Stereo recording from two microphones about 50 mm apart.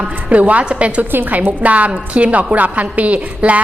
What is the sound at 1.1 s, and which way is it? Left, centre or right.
A woman's voice, right.